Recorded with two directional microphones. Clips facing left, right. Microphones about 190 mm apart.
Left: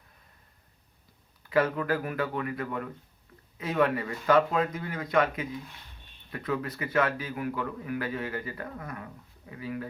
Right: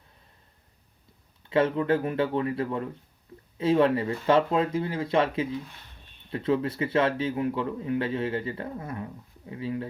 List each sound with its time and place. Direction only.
1.5 s a man's voice: 25° right (ahead or behind)